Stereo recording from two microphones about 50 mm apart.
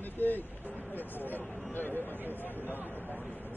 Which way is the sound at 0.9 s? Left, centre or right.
Left.